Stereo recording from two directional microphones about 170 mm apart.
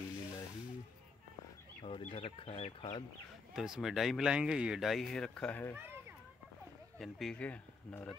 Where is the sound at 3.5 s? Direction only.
Centre (ahead or behind).